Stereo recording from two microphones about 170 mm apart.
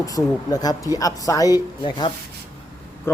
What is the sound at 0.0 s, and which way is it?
Speech, 20° left (ahead or behind).